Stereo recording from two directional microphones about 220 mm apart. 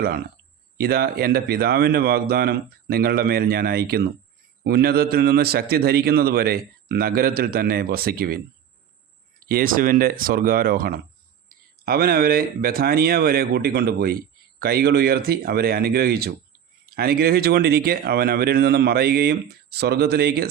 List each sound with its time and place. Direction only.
0.0 s a man's voice: 40° right (ahead or behind)
9.5 s a man's voice: 40° right (ahead or behind)